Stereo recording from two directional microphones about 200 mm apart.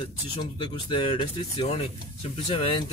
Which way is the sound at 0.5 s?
25° left (ahead or behind).